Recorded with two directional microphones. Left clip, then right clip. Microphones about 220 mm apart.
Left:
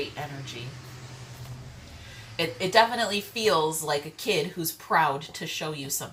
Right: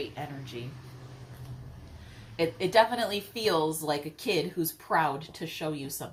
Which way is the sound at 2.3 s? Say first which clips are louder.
Left 2 dB; 20° right (ahead or behind).